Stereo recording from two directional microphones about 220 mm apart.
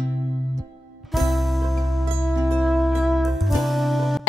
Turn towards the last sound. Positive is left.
turn(degrees=0)  # may be behind; listen again after turning